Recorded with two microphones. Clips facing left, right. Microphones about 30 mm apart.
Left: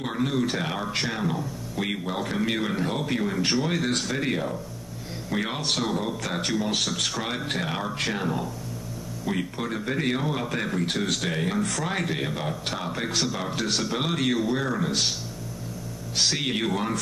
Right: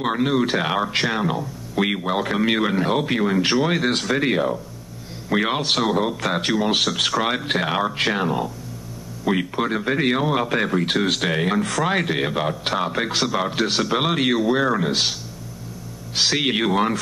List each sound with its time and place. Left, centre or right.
0.0 s speech: right
16.2 s speech: right